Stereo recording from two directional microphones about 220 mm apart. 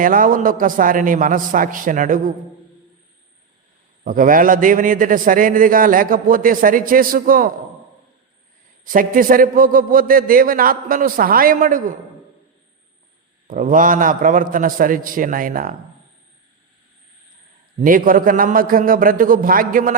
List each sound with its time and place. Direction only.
0.0 s a man's voice: 40° right (ahead or behind)
4.0 s a man's voice: 40° right (ahead or behind)
8.8 s a man's voice: 40° right (ahead or behind)
13.5 s a man's voice: 35° right (ahead or behind)
17.7 s a man's voice: 40° right (ahead or behind)